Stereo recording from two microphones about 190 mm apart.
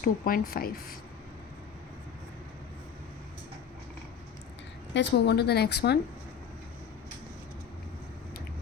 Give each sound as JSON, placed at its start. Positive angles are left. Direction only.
{"t": 0.0, "sound": "speech", "side_deg": 50}
{"t": 4.9, "sound": "a woman's voice", "side_deg": 60}